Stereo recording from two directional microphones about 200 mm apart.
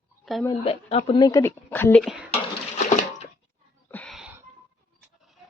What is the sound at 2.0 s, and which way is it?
Speech, 5° right (ahead or behind).